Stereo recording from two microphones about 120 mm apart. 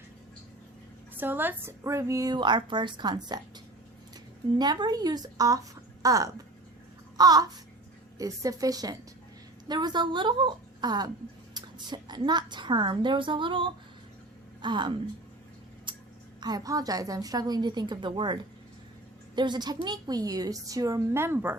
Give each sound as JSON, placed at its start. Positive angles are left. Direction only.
{"t": 1.1, "sound": "a woman's voice", "side_deg": -15}
{"t": 4.5, "sound": "a woman's voice", "side_deg": -35}
{"t": 15.9, "sound": "a sound", "side_deg": -40}
{"t": 16.4, "sound": "a woman's voice", "side_deg": -35}